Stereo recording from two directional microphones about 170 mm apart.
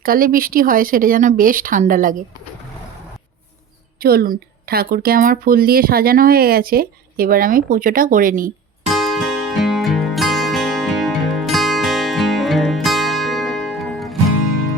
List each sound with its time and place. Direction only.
0.0 s a woman's voice: 55° right (ahead or behind)
4.0 s a woman's voice: 60° right (ahead or behind)
8.9 s music: centre (ahead or behind)